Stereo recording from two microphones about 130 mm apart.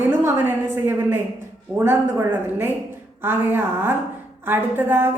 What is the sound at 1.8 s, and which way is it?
A man's voice, 20° right (ahead or behind).